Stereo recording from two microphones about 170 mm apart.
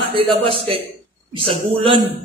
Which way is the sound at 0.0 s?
30° right (ahead or behind).